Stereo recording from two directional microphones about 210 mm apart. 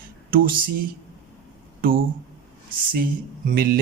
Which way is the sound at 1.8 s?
45° right (ahead or behind).